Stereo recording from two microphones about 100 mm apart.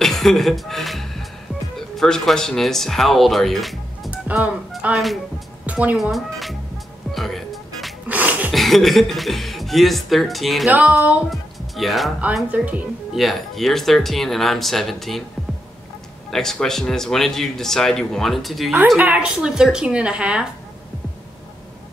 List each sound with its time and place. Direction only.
0.0 s music: 5° left (ahead or behind)
1.8 s speech: 5° left (ahead or behind)
4.1 s music: 15° right (ahead or behind)
4.9 s speech: centre (ahead or behind)
5.7 s a woman's voice: 15° right (ahead or behind)
7.1 s music: centre (ahead or behind)
8.1 s a sound: 15° right (ahead or behind)
8.5 s speech: centre (ahead or behind)
10.7 s a woman's voice: 15° right (ahead or behind)
11.2 s music: centre (ahead or behind)
12.4 s a woman's voice: 15° right (ahead or behind)
13.1 s speech: centre (ahead or behind)
16.3 s speech: 5° left (ahead or behind)
18.9 s a woman's voice: 10° right (ahead or behind)